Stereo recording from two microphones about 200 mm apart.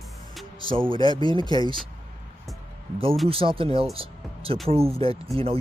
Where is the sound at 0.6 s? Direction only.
25° right (ahead or behind).